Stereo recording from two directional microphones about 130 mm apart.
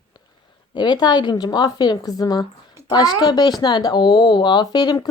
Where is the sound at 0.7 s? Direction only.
35° left (ahead or behind).